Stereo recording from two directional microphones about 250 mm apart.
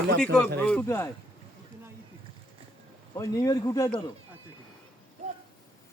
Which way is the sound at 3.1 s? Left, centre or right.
Centre.